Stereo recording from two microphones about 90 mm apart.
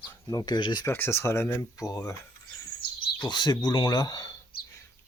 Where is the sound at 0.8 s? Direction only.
25° left (ahead or behind).